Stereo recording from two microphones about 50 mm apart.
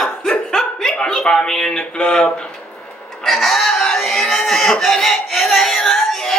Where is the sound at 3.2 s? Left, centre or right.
Centre.